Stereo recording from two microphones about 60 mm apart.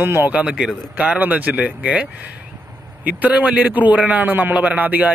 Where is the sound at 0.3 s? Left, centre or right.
Centre.